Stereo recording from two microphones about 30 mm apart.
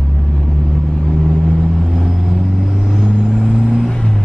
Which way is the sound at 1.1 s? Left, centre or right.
Centre.